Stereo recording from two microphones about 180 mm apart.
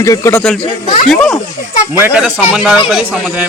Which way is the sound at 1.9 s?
10° right (ahead or behind).